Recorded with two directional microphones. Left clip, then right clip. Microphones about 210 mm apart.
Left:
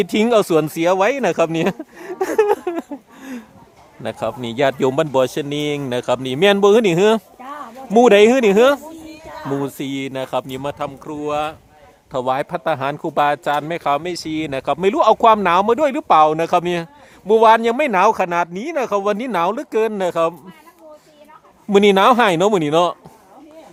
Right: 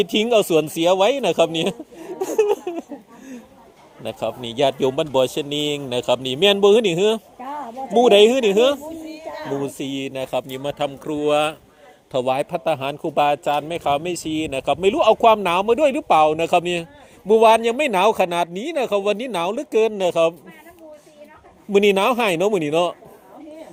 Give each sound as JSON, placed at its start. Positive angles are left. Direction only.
{"t": 0.0, "sound": "a man's voice", "side_deg": 20}
{"t": 12.1, "sound": "a man's voice", "side_deg": 10}
{"t": 21.7, "sound": "a man's voice", "side_deg": 15}